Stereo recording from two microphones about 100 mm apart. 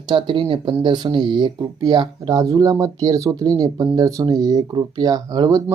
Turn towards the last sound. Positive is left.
turn(degrees=-40)  # may be behind; listen again after turning